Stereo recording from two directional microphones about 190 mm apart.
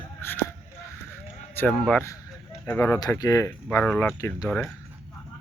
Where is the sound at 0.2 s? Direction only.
10° left (ahead or behind).